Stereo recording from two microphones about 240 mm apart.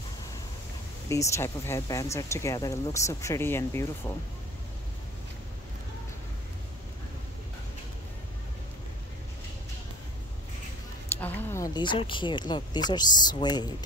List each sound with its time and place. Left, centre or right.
1.0 s speech: centre
11.1 s speech: centre